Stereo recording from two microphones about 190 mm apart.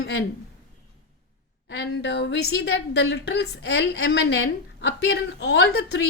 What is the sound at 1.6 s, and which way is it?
A woman's voice, 65° left (ahead or behind).